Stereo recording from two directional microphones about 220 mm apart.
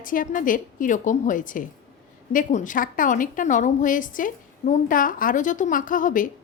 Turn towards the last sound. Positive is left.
turn(degrees=35)  # may be behind; listen again after turning